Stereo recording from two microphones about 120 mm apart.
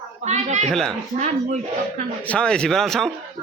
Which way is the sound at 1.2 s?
90° right.